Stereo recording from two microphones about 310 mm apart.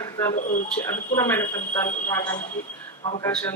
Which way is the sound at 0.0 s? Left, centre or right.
Centre.